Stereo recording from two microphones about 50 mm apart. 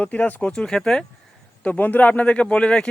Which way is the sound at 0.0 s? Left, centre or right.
Left.